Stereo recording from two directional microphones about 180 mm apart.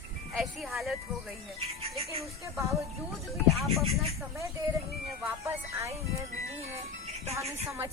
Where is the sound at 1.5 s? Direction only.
35° right (ahead or behind).